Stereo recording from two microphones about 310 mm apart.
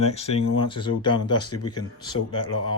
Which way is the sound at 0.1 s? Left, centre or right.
Centre.